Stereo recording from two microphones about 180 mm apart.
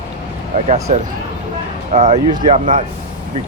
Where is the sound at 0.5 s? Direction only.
40° right (ahead or behind).